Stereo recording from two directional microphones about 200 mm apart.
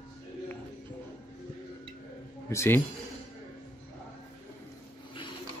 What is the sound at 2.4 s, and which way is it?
Speech, 15° left (ahead or behind).